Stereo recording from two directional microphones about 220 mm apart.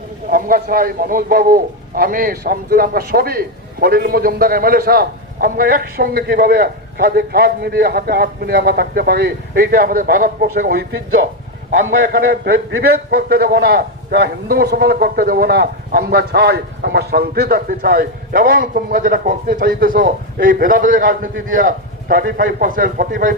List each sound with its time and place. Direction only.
0.3 s a man's voice: 40° right (ahead or behind)